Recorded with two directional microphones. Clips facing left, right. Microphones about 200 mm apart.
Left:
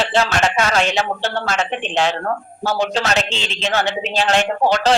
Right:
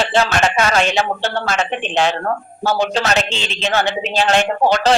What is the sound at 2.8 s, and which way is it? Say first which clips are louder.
A woman's voice: even; 55° right (ahead or behind).